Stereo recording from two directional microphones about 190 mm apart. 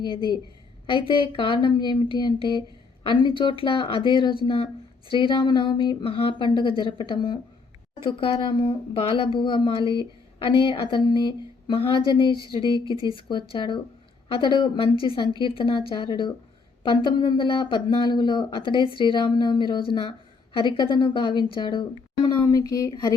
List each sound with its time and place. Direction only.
0.9 s speech: 25° left (ahead or behind)